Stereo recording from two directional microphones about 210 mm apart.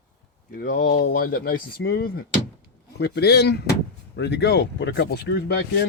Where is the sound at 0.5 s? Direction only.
40° left (ahead or behind).